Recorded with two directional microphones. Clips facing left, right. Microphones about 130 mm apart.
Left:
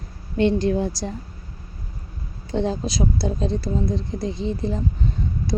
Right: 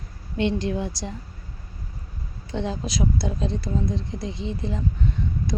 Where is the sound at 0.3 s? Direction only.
40° left (ahead or behind).